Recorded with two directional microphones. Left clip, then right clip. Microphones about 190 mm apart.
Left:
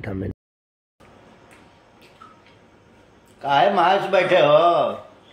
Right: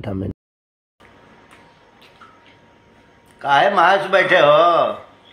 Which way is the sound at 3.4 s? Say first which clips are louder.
Right 3 dB; 10° right (ahead or behind).